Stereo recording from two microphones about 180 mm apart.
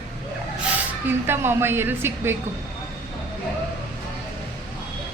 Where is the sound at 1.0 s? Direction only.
10° right (ahead or behind).